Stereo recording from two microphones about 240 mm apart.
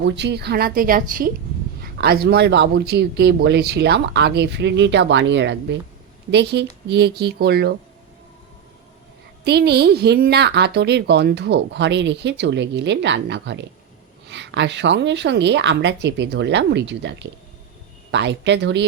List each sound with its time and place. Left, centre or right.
0.0 s a woman's voice: right
9.4 s a woman's voice: right